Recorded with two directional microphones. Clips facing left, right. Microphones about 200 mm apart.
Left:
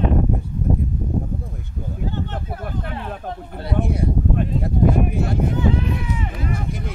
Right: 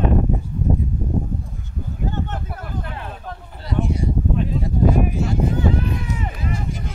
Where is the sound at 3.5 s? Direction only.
60° left (ahead or behind).